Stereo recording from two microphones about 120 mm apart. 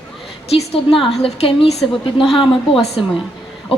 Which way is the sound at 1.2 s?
55° left (ahead or behind).